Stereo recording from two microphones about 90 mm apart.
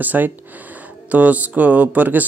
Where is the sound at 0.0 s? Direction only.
20° right (ahead or behind).